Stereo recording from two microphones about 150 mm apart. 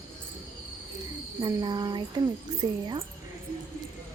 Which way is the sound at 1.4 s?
25° right (ahead or behind).